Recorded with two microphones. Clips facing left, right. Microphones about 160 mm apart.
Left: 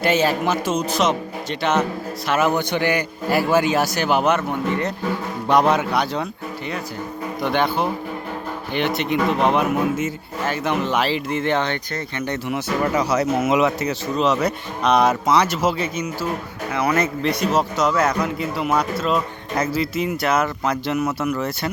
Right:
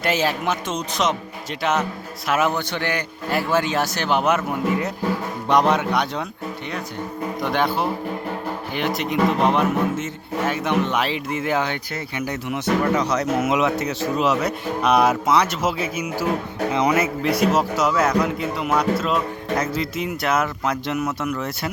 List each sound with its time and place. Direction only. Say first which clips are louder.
0.0 s a man's voice: left 3 dB; centre (ahead or behind)
2.6 s a man's voice: left 4 dB; 15° left (ahead or behind)
7.4 s a man's voice: left 2 dB; centre (ahead or behind)
16.7 s speech: right 1 dB; 15° right (ahead or behind)
17.0 s a man's voice: right 1 dB; 5° right (ahead or behind)